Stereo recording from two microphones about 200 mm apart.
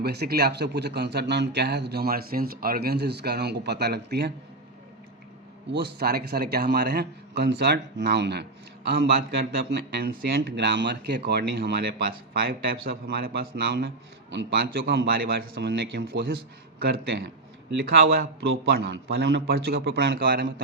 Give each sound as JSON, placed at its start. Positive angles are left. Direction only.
{"t": 0.0, "sound": "a man's voice", "side_deg": -55}
{"t": 5.7, "sound": "a man's voice", "side_deg": -50}